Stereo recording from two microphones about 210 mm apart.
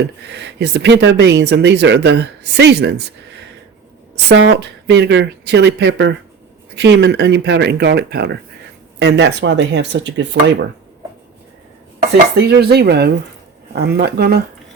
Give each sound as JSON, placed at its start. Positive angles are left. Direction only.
{"t": 0.3, "sound": "speech", "side_deg": -55}
{"t": 4.3, "sound": "speech", "side_deg": -55}
{"t": 12.4, "sound": "speech", "side_deg": -50}